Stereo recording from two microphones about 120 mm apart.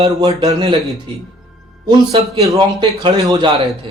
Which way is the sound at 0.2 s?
50° right (ahead or behind).